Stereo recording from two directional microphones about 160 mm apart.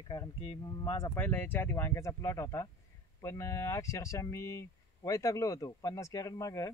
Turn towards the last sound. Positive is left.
turn(degrees=20)  # may be behind; listen again after turning